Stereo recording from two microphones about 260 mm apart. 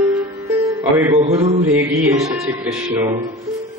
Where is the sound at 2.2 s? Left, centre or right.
Centre.